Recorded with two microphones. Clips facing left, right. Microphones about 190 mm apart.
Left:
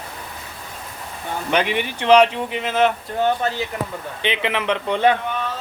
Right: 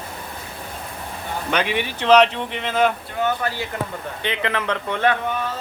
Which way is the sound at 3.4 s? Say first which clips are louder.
Left 2 dB; 25° left (ahead or behind).